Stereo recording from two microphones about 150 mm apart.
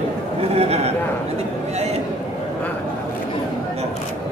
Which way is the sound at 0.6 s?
45° right (ahead or behind).